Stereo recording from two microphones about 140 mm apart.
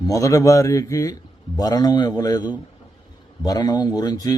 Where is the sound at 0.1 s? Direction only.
25° left (ahead or behind).